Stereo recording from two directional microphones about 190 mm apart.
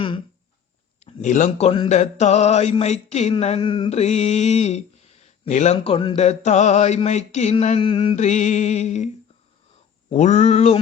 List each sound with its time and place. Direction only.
0.9 s speech: 35° left (ahead or behind)
10.1 s speech: 35° left (ahead or behind)